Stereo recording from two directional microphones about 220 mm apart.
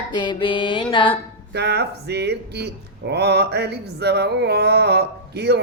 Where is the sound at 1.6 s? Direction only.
50° right (ahead or behind).